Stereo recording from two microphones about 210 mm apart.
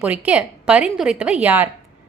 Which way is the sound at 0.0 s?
5° right (ahead or behind).